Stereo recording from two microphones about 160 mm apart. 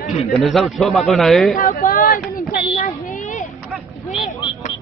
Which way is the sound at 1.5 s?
60° left (ahead or behind).